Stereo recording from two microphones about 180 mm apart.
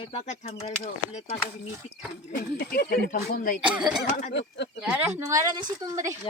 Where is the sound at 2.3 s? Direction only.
60° left (ahead or behind).